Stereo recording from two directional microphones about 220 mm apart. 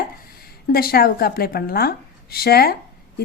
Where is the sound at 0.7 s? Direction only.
45° left (ahead or behind).